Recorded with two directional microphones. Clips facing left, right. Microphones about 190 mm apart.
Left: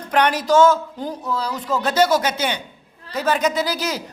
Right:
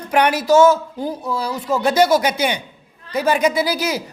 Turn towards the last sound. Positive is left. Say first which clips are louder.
# right 3 dB
turn(degrees=-10)  # may be behind; listen again after turning